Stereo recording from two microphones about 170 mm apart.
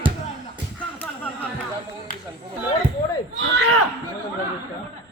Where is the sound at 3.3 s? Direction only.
90° right.